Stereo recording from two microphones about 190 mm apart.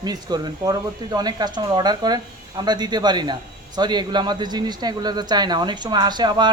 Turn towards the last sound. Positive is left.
turn(degrees=-20)  # may be behind; listen again after turning